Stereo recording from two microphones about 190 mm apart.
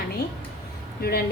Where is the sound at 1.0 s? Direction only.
55° left (ahead or behind).